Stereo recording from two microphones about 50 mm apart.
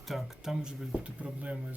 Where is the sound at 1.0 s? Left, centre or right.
Right.